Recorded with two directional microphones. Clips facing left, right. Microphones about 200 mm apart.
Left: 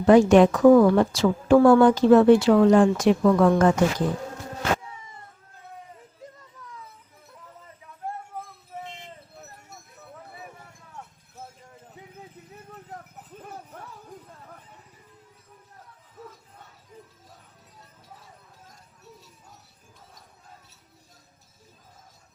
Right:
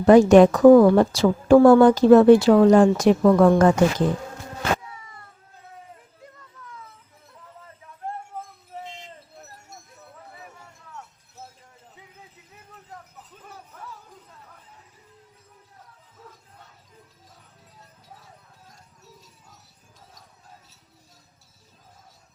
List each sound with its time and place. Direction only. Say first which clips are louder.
0.0 s a woman's voice: right 3 dB; 40° right (ahead or behind)